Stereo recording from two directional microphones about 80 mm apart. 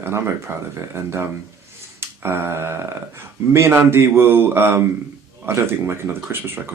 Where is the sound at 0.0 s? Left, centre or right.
Right.